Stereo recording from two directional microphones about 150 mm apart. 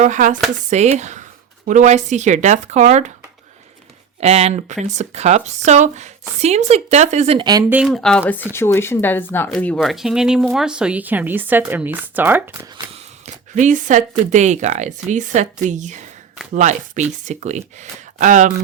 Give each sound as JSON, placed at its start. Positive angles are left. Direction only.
{"t": 0.0, "sound": "speech", "side_deg": -55}
{"t": 4.2, "sound": "speech", "side_deg": -45}
{"t": 7.3, "sound": "speech", "side_deg": -25}
{"t": 7.9, "sound": "speech", "side_deg": 5}
{"t": 13.2, "sound": "speech", "side_deg": -55}